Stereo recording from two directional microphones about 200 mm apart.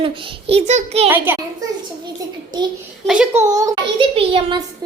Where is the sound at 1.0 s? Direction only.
10° right (ahead or behind).